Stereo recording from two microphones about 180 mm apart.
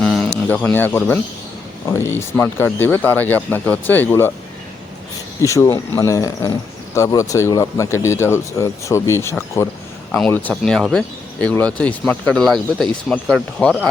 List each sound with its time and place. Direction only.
0.0 s a sound: 5° left (ahead or behind)
0.4 s speech: 10° left (ahead or behind)
5.4 s speech: 15° left (ahead or behind)